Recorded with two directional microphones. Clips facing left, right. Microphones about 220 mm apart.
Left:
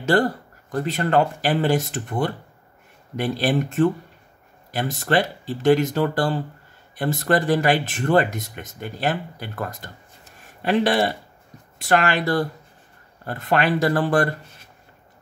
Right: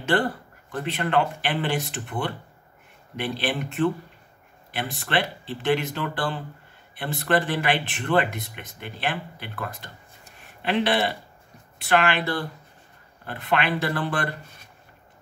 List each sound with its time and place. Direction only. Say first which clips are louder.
0.0 s speech: left 4 dB; 40° left (ahead or behind)